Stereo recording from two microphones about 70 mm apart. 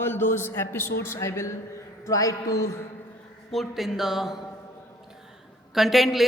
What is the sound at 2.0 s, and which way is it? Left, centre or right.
Speech, left.